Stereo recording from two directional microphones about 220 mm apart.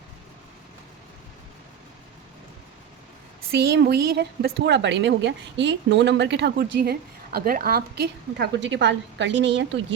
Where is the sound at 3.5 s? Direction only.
45° right (ahead or behind).